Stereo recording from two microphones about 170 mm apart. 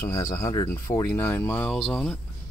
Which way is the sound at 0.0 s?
15° left (ahead or behind).